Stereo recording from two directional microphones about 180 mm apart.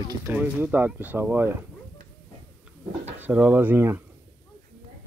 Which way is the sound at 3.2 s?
10° right (ahead or behind).